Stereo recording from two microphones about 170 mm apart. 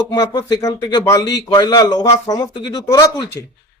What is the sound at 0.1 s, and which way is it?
Speech, 25° left (ahead or behind).